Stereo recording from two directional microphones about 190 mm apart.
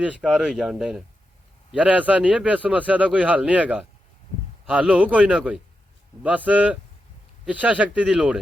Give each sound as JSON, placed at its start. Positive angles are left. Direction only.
{"t": 0.0, "sound": "a man's voice", "side_deg": -5}